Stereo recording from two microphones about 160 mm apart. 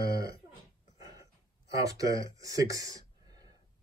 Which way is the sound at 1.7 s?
20° right (ahead or behind).